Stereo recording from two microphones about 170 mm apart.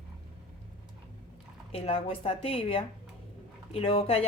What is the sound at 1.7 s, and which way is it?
A woman's voice, 35° left (ahead or behind).